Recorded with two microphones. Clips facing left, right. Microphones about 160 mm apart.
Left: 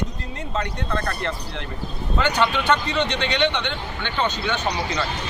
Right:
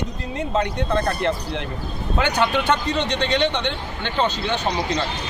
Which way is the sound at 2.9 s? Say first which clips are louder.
Right 2 dB; 35° right (ahead or behind).